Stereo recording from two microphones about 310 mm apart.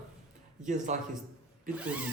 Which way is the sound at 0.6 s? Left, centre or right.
Right.